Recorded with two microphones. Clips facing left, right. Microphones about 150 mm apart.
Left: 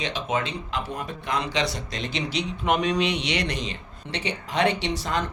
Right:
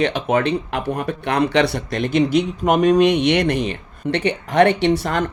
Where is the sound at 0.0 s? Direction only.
60° right (ahead or behind).